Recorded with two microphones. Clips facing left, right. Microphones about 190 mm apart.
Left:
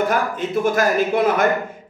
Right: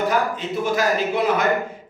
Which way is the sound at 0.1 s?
50° left (ahead or behind).